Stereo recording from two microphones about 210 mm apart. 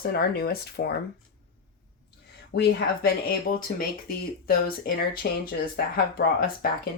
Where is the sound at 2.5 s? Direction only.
50° left (ahead or behind).